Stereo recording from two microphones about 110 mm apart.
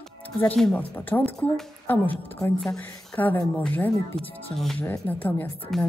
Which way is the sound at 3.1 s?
15° left (ahead or behind).